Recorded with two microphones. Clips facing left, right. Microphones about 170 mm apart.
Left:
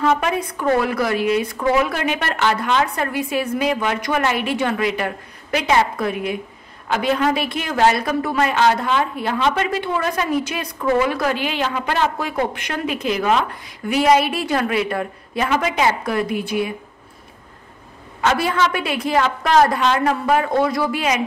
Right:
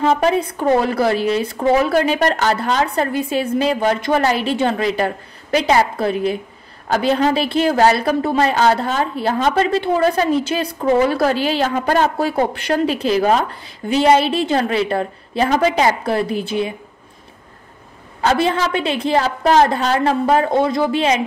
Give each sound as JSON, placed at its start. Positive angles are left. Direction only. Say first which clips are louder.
{"t": 0.0, "sound": "a woman's voice", "louder": "right 3 dB", "side_deg": -35}
{"t": 18.2, "sound": "a woman's voice", "louder": "right 2 dB", "side_deg": -30}